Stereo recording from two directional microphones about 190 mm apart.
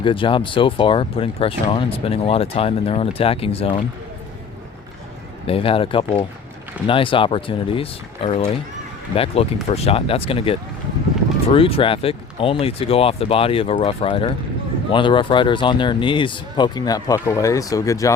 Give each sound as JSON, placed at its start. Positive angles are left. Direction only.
{"t": 0.0, "sound": "speech", "side_deg": 25}
{"t": 5.5, "sound": "speech", "side_deg": 30}